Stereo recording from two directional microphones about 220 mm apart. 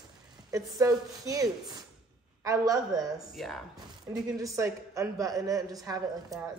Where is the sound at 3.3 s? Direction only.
Centre (ahead or behind).